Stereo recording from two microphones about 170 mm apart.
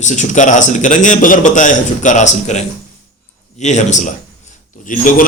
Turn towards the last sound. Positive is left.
turn(degrees=50)  # may be behind; listen again after turning